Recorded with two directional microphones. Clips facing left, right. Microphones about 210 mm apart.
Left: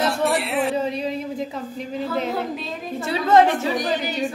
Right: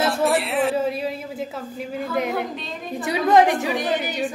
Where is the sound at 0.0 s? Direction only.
Centre (ahead or behind).